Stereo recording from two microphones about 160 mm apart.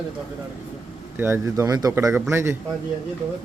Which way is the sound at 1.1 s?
15° right (ahead or behind).